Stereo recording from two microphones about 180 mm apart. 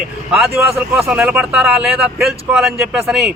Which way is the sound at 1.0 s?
10° right (ahead or behind).